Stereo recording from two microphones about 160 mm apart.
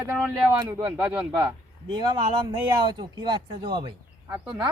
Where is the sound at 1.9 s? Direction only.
25° right (ahead or behind).